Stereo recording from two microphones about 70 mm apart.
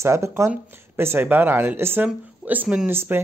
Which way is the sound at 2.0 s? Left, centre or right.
Right.